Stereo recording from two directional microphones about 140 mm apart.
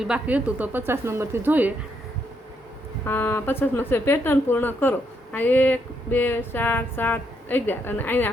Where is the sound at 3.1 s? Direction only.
15° left (ahead or behind).